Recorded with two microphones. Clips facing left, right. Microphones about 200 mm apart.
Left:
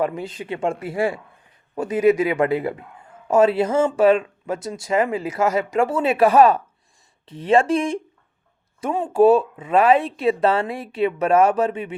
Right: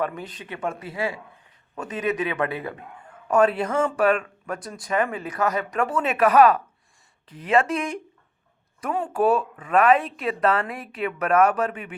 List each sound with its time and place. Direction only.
0.0 s speech: 25° left (ahead or behind)
0.9 s a man's voice: 50° left (ahead or behind)
1.7 s speech: 25° left (ahead or behind)